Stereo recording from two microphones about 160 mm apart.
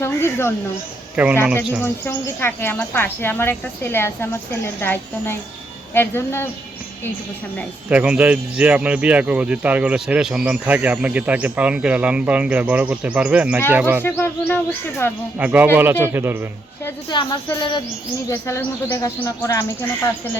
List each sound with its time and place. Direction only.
0.0 s a woman's voice: 15° left (ahead or behind)
1.1 s a man's voice: 10° right (ahead or behind)
1.8 s speech: 15° left (ahead or behind)
7.9 s speech: 10° right (ahead or behind)
14.0 s speech: 10° left (ahead or behind)
15.4 s speech: 10° right (ahead or behind)
17.1 s a sound: 30° left (ahead or behind)
18.3 s speech: 15° left (ahead or behind)